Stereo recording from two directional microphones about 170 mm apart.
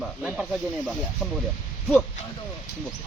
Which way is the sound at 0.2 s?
5° right (ahead or behind).